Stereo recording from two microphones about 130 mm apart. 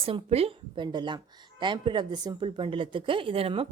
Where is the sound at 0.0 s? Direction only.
50° right (ahead or behind).